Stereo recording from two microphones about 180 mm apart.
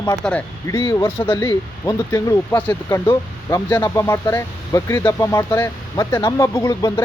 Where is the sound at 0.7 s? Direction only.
15° left (ahead or behind).